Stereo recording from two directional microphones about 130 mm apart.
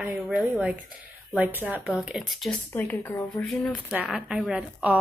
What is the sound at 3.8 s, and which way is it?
A woman's voice, 5° right (ahead or behind).